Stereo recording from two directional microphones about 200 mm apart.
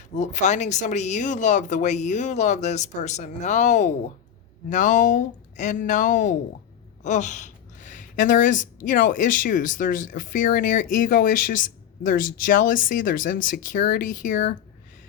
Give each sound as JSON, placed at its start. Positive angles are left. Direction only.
{"t": 0.1, "sound": "speech", "side_deg": 35}